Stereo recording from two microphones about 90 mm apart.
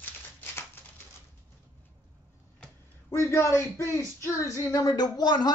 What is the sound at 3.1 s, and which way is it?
Speech, 35° left (ahead or behind).